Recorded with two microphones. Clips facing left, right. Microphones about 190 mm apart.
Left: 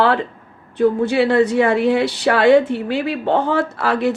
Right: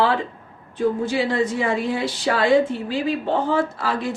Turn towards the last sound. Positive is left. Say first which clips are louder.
# left 6 dB
turn(degrees=70)  # may be behind; listen again after turning